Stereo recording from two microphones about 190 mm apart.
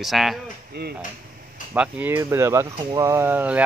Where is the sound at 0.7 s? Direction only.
55° right (ahead or behind).